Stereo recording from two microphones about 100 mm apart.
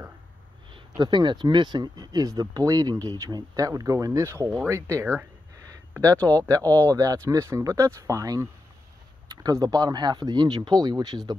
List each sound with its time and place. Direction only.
0.7 s speech: 50° right (ahead or behind); by 4.6 s 30° right (ahead or behind)
4.6 s a sound: 30° right (ahead or behind)
6.1 s speech: 15° left (ahead or behind)
6.4 s speech: 35° right (ahead or behind)